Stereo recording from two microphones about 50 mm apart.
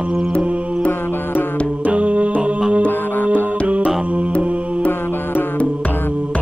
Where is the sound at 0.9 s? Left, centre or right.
Left.